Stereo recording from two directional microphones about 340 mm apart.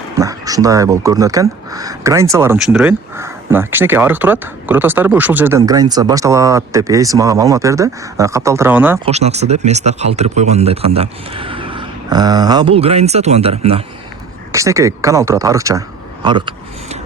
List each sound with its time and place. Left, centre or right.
0.2 s speech: centre
9.0 s speech: centre
16.2 s vehicle: centre